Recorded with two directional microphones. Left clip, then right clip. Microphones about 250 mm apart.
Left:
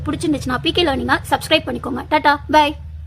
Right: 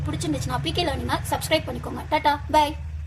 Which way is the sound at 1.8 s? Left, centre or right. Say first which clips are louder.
Left 7 dB; left.